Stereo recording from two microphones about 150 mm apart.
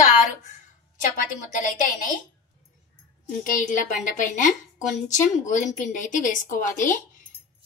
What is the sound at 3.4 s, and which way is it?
A woman's voice, 55° left (ahead or behind).